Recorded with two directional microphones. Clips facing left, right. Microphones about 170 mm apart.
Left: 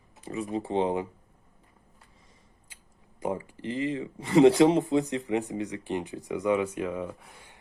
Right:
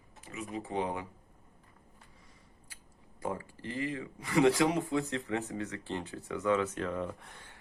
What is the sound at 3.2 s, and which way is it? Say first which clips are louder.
Speech: left 6 dB; 20° left (ahead or behind).